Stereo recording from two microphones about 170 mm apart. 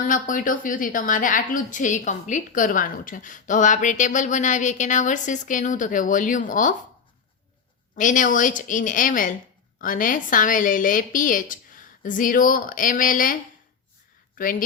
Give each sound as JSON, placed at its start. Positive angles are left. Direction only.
{"t": 0.1, "sound": "a woman's voice", "side_deg": 50}
{"t": 7.9, "sound": "a woman's voice", "side_deg": 50}
{"t": 14.4, "sound": "speech", "side_deg": 55}